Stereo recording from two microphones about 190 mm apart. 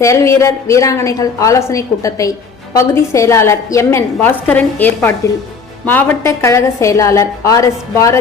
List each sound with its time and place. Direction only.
0.0 s a woman's voice: 15° left (ahead or behind)